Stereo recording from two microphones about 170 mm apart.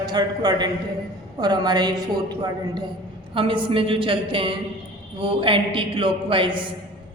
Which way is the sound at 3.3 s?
30° right (ahead or behind).